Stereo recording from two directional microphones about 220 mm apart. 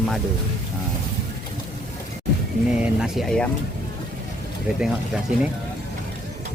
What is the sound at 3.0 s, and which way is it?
Speech, centre (ahead or behind).